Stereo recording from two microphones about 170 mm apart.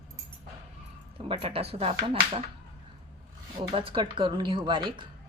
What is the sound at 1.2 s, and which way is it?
Speech, 35° right (ahead or behind).